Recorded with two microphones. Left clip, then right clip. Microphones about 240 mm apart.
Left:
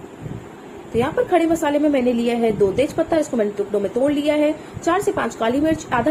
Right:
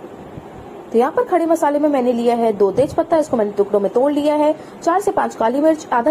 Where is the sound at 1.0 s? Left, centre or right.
Centre.